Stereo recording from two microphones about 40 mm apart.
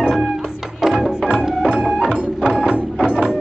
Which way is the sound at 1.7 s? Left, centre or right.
Centre.